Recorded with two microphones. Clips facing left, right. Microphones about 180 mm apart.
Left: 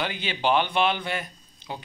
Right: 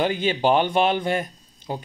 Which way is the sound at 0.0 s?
45° right (ahead or behind).